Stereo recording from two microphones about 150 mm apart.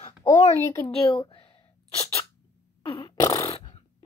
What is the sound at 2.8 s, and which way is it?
Fart, 35° left (ahead or behind).